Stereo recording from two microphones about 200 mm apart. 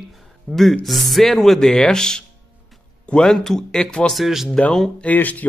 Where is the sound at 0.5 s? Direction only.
Centre (ahead or behind).